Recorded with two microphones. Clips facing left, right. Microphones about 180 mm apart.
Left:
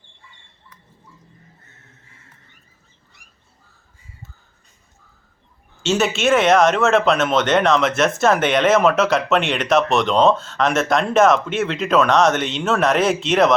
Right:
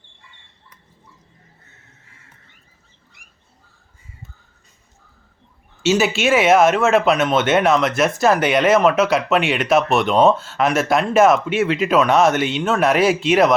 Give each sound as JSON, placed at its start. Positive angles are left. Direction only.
{"t": 5.8, "sound": "speech", "side_deg": 0}